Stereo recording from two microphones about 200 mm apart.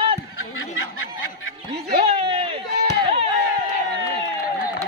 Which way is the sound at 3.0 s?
30° right (ahead or behind).